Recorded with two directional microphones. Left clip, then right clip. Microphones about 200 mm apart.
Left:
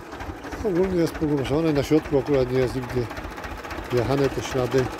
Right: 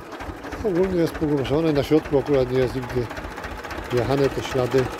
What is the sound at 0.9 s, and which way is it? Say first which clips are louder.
Speech: right 1 dB; centre (ahead or behind).